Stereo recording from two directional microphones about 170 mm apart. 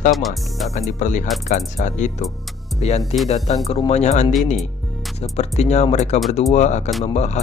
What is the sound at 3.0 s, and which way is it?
Speech, centre (ahead or behind).